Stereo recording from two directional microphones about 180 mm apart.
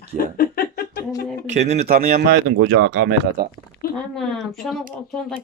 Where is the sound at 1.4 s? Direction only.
40° right (ahead or behind).